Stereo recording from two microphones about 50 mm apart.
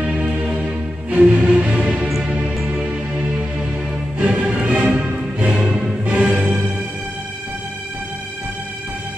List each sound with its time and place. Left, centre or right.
0.0 s music: right